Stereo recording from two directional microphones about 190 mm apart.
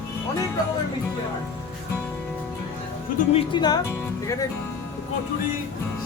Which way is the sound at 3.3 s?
25° left (ahead or behind).